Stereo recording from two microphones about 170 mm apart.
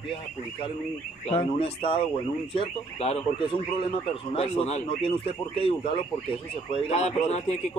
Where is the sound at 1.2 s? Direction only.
35° left (ahead or behind).